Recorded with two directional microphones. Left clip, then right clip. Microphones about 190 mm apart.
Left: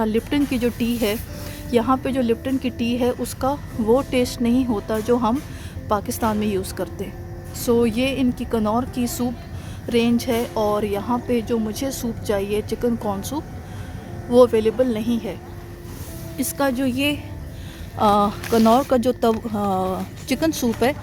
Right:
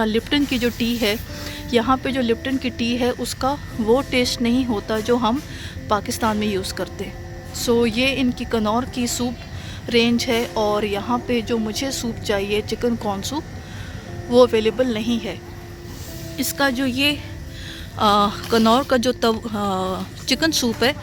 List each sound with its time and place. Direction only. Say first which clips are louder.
0.0 s speech: right 1 dB; centre (ahead or behind)
16.4 s speech: right 1 dB; 5° left (ahead or behind)